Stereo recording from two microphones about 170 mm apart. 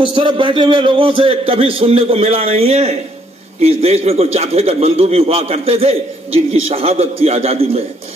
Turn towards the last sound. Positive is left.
turn(degrees=-35)  # may be behind; listen again after turning